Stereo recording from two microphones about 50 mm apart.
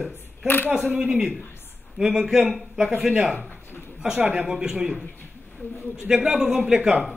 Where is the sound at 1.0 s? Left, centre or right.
Centre.